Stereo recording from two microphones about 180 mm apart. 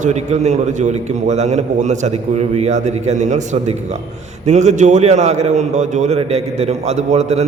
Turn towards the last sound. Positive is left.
turn(degrees=-35)  # may be behind; listen again after turning